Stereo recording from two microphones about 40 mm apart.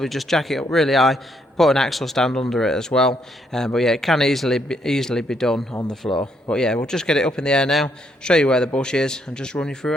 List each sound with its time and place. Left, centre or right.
0.0 s a man's voice: centre
6.1 s speech: left